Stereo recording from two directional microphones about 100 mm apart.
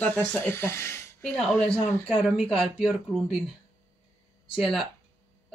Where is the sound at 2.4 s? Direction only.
10° left (ahead or behind).